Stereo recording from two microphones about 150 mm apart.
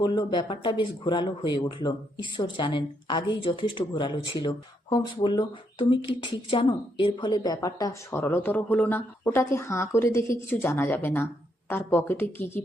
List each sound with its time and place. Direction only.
0.0 s speech: 30° left (ahead or behind)
8.1 s speech: 15° left (ahead or behind)